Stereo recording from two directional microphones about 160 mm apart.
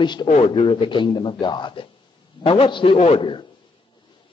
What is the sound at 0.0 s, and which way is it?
A man's voice, 25° left (ahead or behind).